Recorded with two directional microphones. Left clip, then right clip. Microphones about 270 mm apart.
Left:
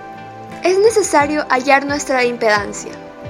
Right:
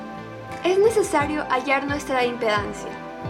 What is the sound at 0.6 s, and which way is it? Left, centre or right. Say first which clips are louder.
A woman's voice: left 6 dB; centre.